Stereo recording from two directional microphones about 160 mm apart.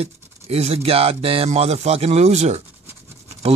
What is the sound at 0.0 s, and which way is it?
Speech, 40° right (ahead or behind).